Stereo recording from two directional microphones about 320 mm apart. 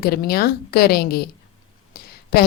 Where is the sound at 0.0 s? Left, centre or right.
Left.